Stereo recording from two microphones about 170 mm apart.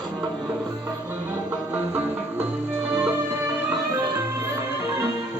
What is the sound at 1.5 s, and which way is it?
Music, 10° right (ahead or behind).